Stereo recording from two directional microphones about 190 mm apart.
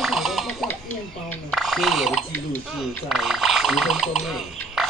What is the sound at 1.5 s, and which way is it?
Speech, centre (ahead or behind).